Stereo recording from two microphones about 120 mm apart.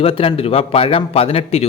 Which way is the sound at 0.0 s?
50° left (ahead or behind).